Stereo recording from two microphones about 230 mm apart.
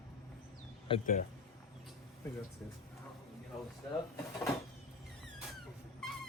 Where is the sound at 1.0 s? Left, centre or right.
Left.